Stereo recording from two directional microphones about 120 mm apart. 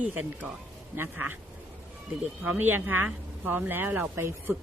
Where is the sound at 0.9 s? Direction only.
15° right (ahead or behind).